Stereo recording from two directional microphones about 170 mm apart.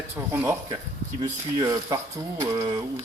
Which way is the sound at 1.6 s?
20° right (ahead or behind).